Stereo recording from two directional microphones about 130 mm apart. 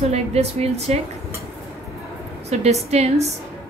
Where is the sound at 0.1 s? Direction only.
50° right (ahead or behind).